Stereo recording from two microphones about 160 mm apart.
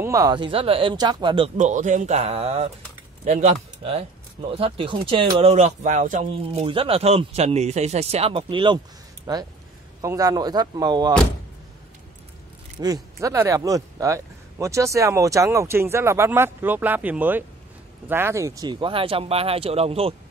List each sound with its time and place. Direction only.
0.0 s speech: 25° right (ahead or behind)
1.6 s speech: 50° right (ahead or behind)
6.3 s speech: 35° right (ahead or behind)
12.8 s speech: 20° right (ahead or behind); by 20.2 s 40° right (ahead or behind)